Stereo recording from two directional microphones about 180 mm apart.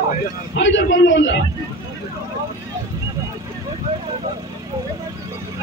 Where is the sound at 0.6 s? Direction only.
90° left.